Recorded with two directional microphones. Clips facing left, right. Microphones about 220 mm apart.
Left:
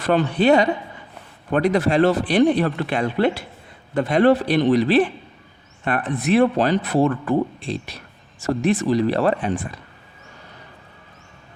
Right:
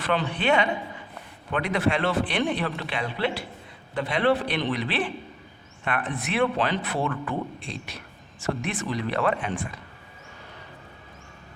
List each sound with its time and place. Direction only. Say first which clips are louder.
0.0 s speech: left 8 dB; 40° left (ahead or behind)